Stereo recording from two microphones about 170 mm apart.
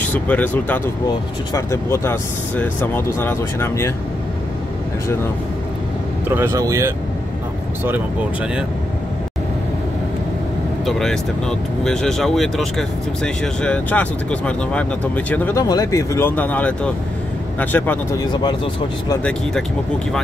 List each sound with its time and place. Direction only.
0.0 s speech: 10° left (ahead or behind)
6.2 s speech: 15° right (ahead or behind)
10.9 s speech: 5° left (ahead or behind)
18.3 s speech: 25° left (ahead or behind)